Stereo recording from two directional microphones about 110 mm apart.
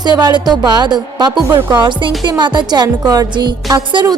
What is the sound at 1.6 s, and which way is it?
Speech, 20° right (ahead or behind).